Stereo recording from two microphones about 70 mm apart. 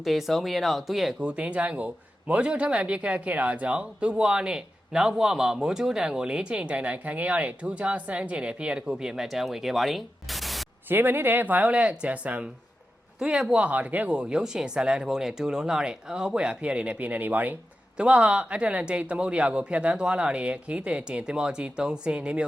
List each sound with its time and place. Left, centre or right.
0.0 s speech: centre
1.2 s a man's voice: centre
10.8 s a man's voice: right
17.9 s a man's voice: centre